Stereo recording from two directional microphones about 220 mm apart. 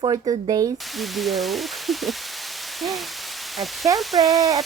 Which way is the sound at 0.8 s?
Centre (ahead or behind).